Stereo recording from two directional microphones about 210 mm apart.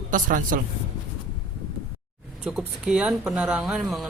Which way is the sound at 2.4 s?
5° right (ahead or behind).